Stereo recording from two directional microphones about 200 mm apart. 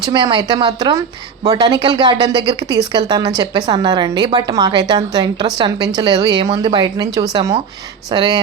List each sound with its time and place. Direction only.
0.0 s speech: 20° right (ahead or behind)